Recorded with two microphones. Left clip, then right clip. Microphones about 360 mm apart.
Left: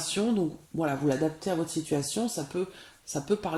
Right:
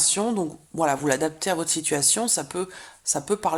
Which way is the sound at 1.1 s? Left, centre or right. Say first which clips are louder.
Right 5 dB; right.